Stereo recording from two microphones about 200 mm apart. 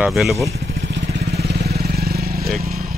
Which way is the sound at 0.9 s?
55° right (ahead or behind).